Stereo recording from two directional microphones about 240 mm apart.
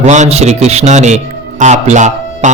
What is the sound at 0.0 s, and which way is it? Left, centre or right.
A man's voice, right.